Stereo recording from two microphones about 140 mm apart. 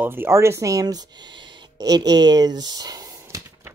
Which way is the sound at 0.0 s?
15° right (ahead or behind).